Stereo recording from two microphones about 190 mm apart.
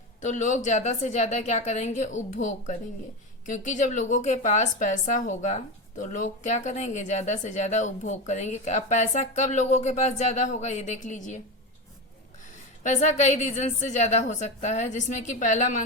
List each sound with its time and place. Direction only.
0.2 s a woman's voice: 40° left (ahead or behind)
12.8 s a woman's voice: 40° left (ahead or behind)